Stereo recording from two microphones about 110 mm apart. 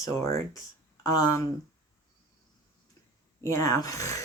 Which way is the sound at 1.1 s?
30° left (ahead or behind).